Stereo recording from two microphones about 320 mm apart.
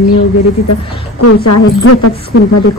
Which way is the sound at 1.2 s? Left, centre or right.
Left.